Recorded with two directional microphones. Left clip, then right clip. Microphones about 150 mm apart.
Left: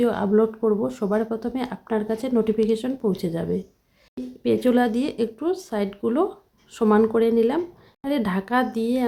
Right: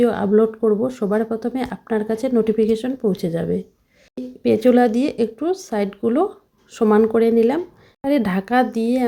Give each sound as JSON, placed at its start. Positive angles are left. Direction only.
{"t": 0.0, "sound": "speech", "side_deg": -15}